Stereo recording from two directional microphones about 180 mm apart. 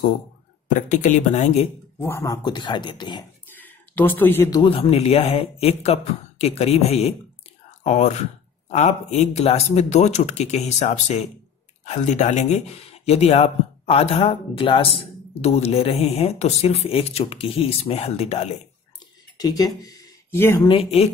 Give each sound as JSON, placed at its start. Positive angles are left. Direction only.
{"t": 0.7, "sound": "a woman's voice", "side_deg": 45}
{"t": 2.0, "sound": "speech", "side_deg": 15}
{"t": 3.4, "sound": "speech", "side_deg": 10}
{"t": 19.3, "sound": "speech", "side_deg": 20}
{"t": 20.6, "sound": "speech", "side_deg": 30}